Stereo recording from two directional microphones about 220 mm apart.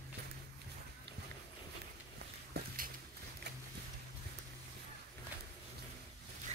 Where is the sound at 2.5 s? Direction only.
45° right (ahead or behind).